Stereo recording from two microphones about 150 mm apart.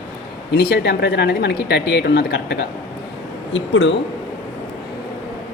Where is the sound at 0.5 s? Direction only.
90° left.